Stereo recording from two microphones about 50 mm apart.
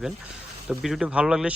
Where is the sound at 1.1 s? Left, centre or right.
Centre.